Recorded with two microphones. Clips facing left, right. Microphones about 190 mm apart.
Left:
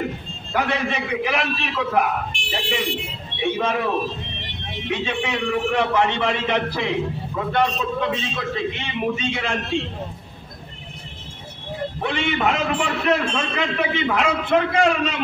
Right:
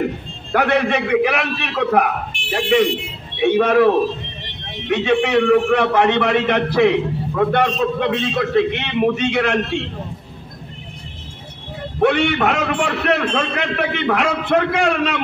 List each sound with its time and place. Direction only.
0.5 s a man's voice: 65° right (ahead or behind)
12.0 s a man's voice: 65° right (ahead or behind)